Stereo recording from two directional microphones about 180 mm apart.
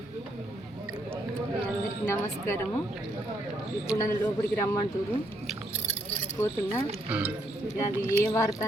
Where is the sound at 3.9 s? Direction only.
5° right (ahead or behind).